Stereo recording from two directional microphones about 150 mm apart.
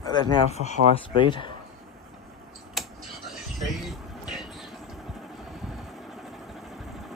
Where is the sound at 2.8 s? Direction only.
Centre (ahead or behind).